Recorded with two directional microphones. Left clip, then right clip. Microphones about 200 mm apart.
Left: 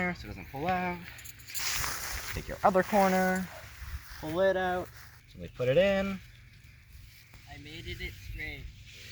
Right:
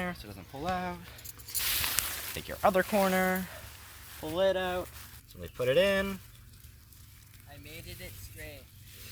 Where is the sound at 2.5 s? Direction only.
5° right (ahead or behind).